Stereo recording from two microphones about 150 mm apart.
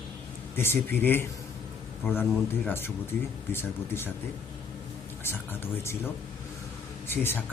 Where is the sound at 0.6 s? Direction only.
15° left (ahead or behind).